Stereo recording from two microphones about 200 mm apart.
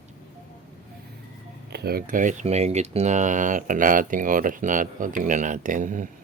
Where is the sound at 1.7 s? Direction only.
50° right (ahead or behind).